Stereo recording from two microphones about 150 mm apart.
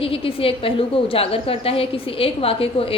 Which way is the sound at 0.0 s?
40° left (ahead or behind).